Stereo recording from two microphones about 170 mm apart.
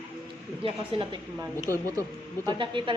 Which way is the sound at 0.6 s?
30° right (ahead or behind).